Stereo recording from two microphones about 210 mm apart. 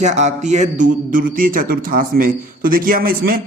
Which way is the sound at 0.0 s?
35° right (ahead or behind).